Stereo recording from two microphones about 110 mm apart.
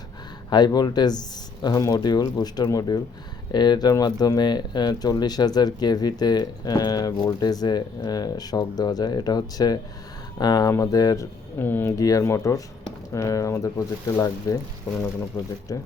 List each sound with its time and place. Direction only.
0.5 s speech: 40° left (ahead or behind)
11.6 s speech: 20° left (ahead or behind)
11.9 s speech: 30° left (ahead or behind)